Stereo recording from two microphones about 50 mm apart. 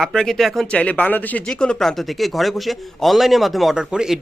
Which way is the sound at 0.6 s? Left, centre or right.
Left.